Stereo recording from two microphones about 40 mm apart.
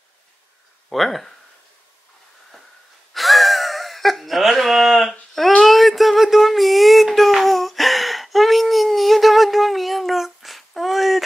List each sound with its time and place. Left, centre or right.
0.8 s speech: centre
3.1 s wail: centre
4.4 s a sound: centre